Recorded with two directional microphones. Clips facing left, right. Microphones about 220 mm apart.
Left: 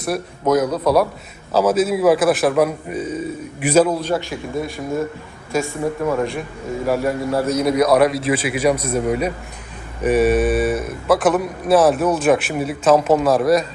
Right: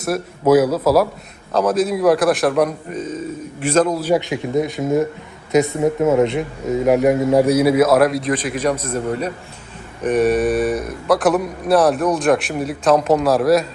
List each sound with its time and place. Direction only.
0.0 s a man's voice: 5° right (ahead or behind)
4.0 s a man's voice: 15° right (ahead or behind); by 13.7 s centre (ahead or behind)